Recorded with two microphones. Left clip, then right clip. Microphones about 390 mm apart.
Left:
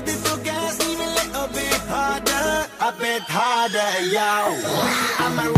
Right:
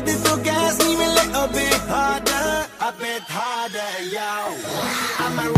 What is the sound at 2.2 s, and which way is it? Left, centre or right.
Music, centre.